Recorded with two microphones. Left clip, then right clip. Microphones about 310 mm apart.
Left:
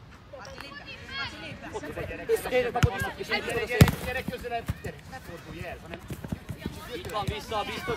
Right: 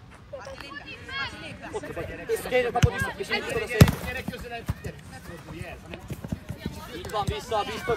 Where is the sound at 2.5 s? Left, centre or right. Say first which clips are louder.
Right 2 dB; right.